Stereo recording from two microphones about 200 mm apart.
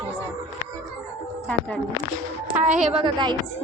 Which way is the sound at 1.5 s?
5° left (ahead or behind).